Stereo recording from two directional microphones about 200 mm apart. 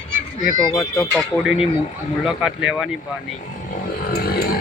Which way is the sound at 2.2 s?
5° right (ahead or behind).